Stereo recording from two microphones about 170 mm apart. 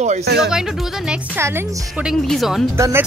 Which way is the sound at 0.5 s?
Centre (ahead or behind).